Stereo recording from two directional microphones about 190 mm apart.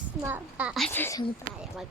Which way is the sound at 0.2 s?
10° right (ahead or behind).